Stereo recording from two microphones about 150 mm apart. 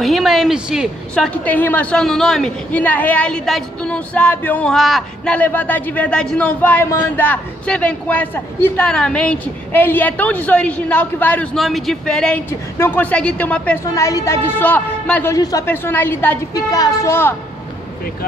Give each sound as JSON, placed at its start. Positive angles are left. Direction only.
{"t": 0.0, "sound": "a woman's voice", "side_deg": 0}
{"t": 11.5, "sound": "a woman's voice", "side_deg": 0}
{"t": 13.9, "sound": "a woman's voice", "side_deg": 20}
{"t": 15.3, "sound": "a woman's voice", "side_deg": 25}